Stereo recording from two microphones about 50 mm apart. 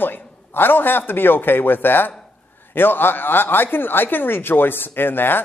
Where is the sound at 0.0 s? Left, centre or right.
Left.